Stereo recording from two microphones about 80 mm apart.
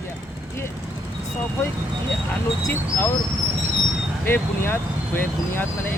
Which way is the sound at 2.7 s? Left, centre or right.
Left.